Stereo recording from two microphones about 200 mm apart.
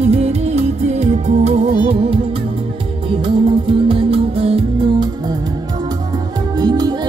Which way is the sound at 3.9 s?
30° right (ahead or behind).